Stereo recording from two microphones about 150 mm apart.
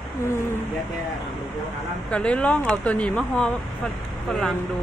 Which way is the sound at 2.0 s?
5° left (ahead or behind).